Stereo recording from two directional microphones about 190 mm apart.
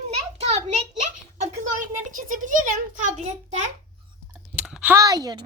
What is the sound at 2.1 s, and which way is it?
A child's voice, 45° right (ahead or behind).